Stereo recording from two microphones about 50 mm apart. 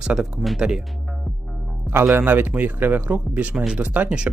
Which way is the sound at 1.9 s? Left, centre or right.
Right.